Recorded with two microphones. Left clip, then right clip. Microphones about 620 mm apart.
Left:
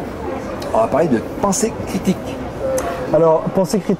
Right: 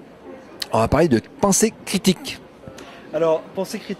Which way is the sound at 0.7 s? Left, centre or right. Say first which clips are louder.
Left 2 dB; right.